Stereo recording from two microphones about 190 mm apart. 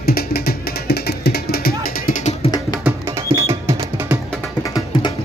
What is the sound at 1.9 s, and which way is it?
Music, 40° left (ahead or behind).